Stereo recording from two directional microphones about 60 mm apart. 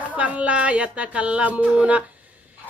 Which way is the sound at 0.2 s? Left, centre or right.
Right.